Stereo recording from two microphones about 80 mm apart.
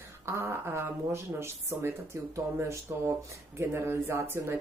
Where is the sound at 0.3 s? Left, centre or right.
Right.